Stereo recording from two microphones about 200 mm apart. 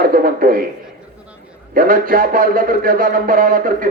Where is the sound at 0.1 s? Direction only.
45° right (ahead or behind).